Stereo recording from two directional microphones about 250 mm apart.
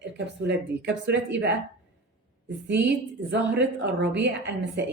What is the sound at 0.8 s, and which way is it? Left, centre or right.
Speech, right.